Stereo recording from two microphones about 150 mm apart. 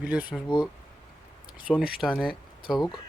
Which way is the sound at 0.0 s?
10° right (ahead or behind).